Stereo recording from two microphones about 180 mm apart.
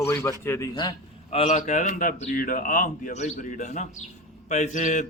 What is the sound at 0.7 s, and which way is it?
A man's voice, 30° left (ahead or behind).